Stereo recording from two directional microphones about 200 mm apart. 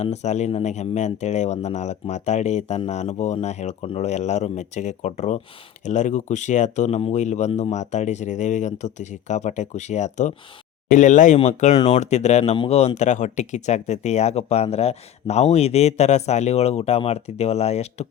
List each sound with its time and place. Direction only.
0.0 s speech: 35° left (ahead or behind)